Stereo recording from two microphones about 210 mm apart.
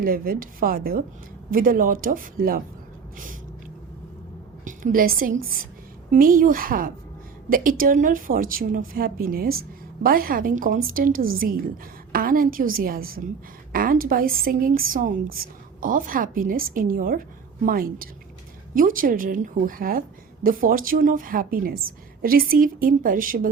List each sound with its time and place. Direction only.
0.0 s a woman's voice: 40° right (ahead or behind)
4.6 s a woman's voice: 40° right (ahead or behind)